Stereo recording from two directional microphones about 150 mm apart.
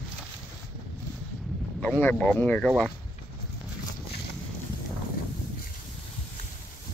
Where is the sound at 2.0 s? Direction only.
10° left (ahead or behind).